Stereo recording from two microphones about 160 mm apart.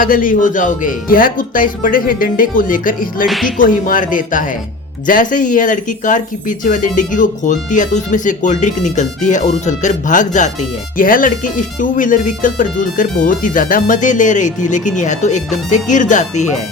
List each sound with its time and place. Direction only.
0.0 s speech: 60° left (ahead or behind)
3.2 s music: centre (ahead or behind)
3.6 s speech: 55° left (ahead or behind)